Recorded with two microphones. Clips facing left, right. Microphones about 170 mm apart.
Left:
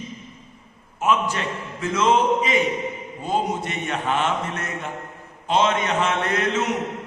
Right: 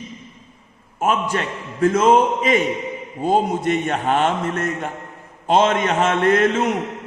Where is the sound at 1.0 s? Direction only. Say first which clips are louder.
Right 2 dB; 50° right (ahead or behind).